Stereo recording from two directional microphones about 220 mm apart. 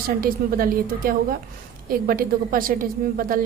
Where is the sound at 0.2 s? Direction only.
40° right (ahead or behind).